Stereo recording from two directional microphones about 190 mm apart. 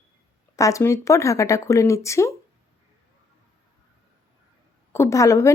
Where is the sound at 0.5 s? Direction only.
15° left (ahead or behind).